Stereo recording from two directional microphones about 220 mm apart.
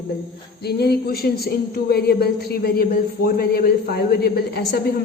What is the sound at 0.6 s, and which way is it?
A woman's voice, 45° left (ahead or behind).